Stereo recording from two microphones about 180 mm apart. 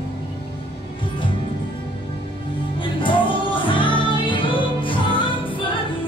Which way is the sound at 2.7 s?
25° left (ahead or behind).